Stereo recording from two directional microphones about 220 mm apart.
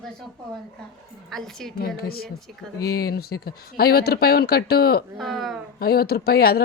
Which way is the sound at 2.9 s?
45° left (ahead or behind).